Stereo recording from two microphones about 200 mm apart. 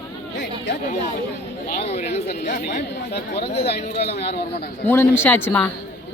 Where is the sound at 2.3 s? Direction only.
50° left (ahead or behind).